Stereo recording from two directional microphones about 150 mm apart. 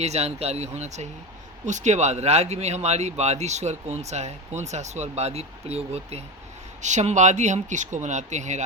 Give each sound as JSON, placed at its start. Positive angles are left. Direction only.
{"t": 0.0, "sound": "speech", "side_deg": -45}